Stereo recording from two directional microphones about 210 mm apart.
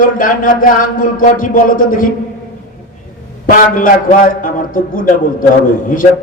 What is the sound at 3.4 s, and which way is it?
A man's voice, 40° left (ahead or behind).